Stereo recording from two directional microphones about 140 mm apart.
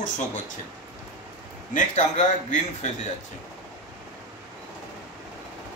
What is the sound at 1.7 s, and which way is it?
A man's voice, 60° left (ahead or behind).